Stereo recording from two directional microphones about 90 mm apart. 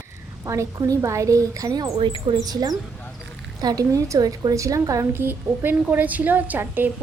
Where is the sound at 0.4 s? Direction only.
35° right (ahead or behind).